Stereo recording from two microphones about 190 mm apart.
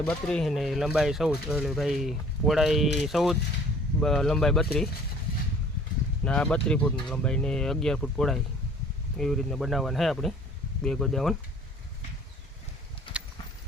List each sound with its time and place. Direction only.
0.0 s speech: 5° left (ahead or behind)
6.2 s speech: 5° left (ahead or behind)
13.1 s clip-clop: 25° left (ahead or behind)